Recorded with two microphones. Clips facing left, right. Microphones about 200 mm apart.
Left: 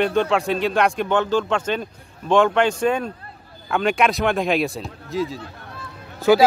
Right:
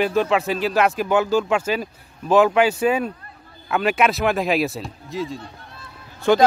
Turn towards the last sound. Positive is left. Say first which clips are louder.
# left 2 dB
turn(degrees=5)  # may be behind; listen again after turning